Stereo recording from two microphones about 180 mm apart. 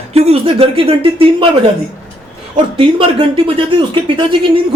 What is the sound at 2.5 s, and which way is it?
A man's voice, 30° right (ahead or behind).